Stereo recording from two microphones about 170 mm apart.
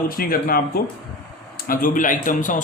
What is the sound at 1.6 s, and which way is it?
Speech, 55° left (ahead or behind).